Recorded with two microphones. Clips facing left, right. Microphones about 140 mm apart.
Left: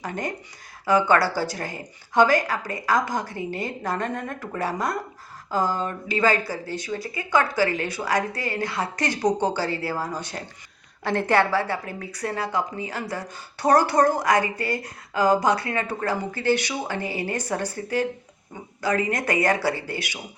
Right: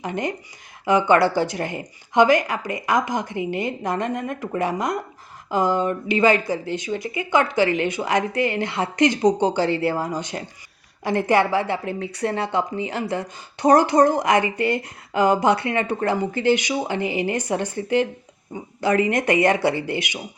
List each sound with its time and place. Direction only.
0.9 s speech: 20° right (ahead or behind)